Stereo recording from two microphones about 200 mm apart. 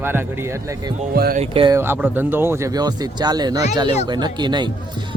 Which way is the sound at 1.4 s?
25° right (ahead or behind).